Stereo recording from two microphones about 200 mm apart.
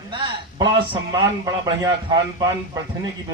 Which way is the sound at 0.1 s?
25° right (ahead or behind).